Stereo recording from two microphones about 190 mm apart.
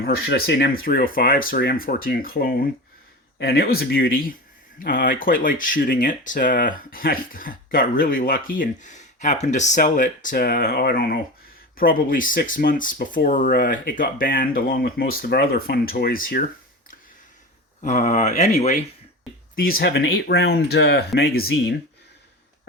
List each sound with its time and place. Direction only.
0.0 s speech: 55° left (ahead or behind)
17.8 s speech: 40° left (ahead or behind)
19.5 s speech: 50° left (ahead or behind)
19.9 s speech: 65° left (ahead or behind)
21.2 s speech: 55° left (ahead or behind)